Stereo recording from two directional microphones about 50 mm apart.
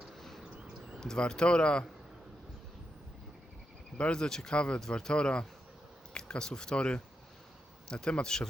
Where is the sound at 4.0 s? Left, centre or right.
Centre.